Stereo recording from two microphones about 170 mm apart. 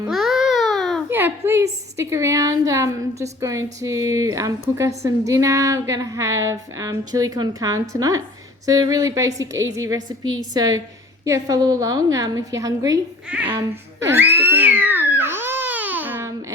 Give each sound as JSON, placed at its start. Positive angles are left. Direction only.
{"t": 0.1, "sound": "babbling", "side_deg": 0}
{"t": 1.1, "sound": "a woman's voice", "side_deg": -15}
{"t": 13.2, "sound": "a child's voice", "side_deg": -5}
{"t": 13.5, "sound": "a sound", "side_deg": -20}